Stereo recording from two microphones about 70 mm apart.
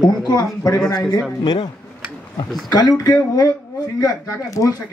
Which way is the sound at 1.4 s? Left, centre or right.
Left.